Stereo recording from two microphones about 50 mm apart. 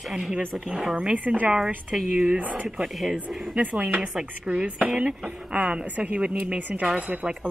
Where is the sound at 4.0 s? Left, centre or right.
Centre.